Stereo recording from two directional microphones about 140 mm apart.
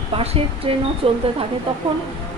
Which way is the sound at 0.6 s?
40° right (ahead or behind).